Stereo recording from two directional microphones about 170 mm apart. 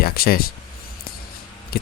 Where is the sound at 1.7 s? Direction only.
60° left (ahead or behind).